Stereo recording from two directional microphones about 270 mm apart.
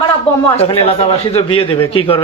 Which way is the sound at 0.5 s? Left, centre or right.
Left.